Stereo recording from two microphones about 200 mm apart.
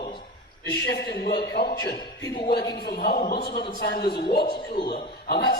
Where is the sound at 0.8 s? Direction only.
55° left (ahead or behind).